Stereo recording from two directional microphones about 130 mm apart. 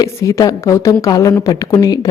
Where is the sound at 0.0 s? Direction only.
25° left (ahead or behind).